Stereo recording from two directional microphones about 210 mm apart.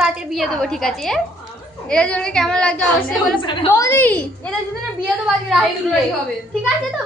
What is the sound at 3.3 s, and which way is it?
Speech, 20° left (ahead or behind).